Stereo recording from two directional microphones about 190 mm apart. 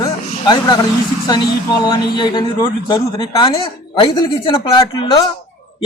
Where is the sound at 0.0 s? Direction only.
20° left (ahead or behind).